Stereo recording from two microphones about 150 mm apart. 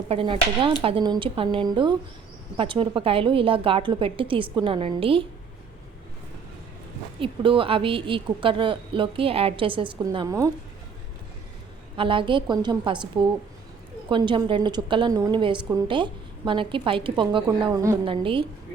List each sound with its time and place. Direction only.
0.1 s a woman's voice: 35° right (ahead or behind)
7.2 s a woman's voice: 35° right (ahead or behind)
11.9 s a woman's voice: 35° right (ahead or behind)
18.0 s a woman's voice: 35° right (ahead or behind)